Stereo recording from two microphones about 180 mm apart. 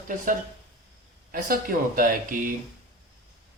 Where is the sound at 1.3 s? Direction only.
50° right (ahead or behind).